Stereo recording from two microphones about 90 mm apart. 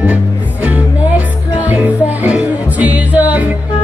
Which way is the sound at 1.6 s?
15° right (ahead or behind).